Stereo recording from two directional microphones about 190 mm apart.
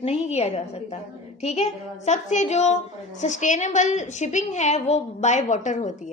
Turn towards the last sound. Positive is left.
turn(degrees=40)  # may be behind; listen again after turning